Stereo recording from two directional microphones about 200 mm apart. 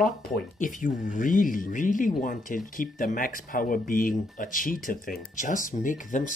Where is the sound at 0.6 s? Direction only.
40° left (ahead or behind).